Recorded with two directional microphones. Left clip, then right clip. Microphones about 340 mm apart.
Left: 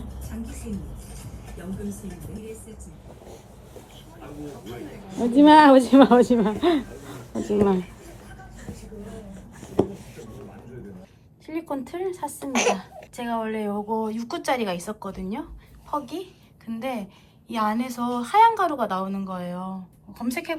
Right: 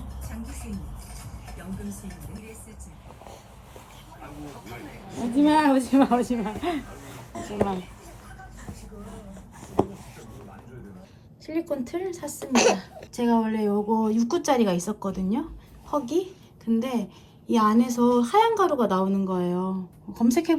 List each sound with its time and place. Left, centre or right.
4.4 s speech: centre
5.2 s speech: centre
6.8 s speech: centre
7.2 s a sound: centre
8.6 s a sound: centre
11.4 s speech: centre